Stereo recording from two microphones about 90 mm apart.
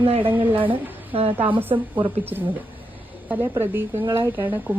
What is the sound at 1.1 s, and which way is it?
Speech, 90° right.